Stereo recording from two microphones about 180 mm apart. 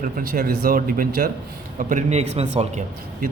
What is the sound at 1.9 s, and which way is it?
Speech, 35° right (ahead or behind).